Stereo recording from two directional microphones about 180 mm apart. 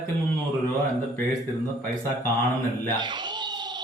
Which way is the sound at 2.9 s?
25° right (ahead or behind).